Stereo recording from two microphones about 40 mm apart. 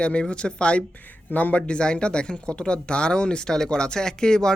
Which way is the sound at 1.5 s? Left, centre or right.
Left.